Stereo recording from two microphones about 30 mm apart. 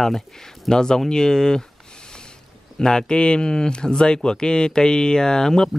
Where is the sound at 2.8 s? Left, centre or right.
Left.